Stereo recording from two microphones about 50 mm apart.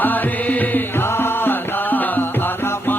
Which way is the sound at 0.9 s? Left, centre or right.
Left.